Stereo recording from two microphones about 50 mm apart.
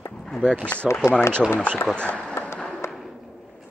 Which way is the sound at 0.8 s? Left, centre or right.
Centre.